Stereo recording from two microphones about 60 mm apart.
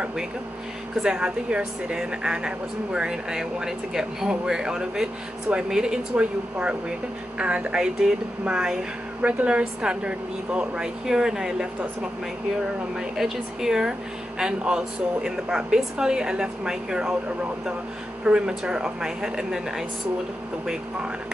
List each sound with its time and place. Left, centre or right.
1.0 s speech: centre
9.2 s speech: right
13.2 s speech: centre
18.2 s speech: centre